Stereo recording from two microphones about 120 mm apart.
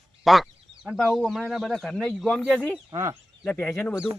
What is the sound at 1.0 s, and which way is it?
Speech, centre (ahead or behind).